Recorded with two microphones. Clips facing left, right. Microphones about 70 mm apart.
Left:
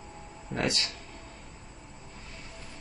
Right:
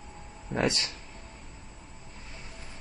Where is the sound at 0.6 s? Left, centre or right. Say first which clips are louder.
Right 2 dB; right.